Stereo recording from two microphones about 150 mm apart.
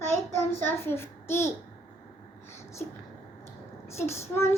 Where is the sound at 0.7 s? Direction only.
15° left (ahead or behind).